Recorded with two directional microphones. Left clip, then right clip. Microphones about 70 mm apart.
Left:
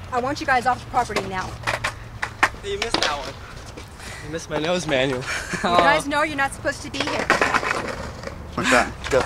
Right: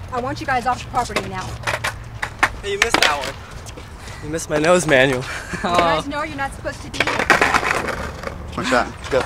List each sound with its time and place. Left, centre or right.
0.1 s speech: centre
1.4 s skateboard: centre
2.7 s speech: right
5.2 s speech: centre
5.9 s speech: left
6.9 s a sound: right
8.6 s a sound: centre